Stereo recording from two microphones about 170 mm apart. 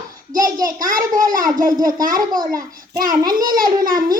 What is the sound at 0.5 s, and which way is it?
A child's voice, 55° right (ahead or behind).